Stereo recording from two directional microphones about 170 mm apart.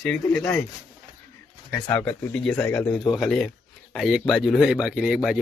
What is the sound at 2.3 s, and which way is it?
Speech, 5° left (ahead or behind).